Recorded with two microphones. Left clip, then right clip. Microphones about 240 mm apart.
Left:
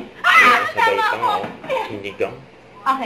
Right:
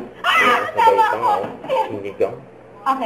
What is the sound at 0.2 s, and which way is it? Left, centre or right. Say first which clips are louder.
A woman's voice: left 3 dB; left.